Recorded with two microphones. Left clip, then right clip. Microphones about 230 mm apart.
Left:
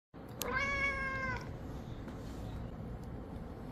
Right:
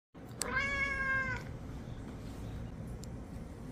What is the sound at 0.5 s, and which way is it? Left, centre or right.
Cat, right.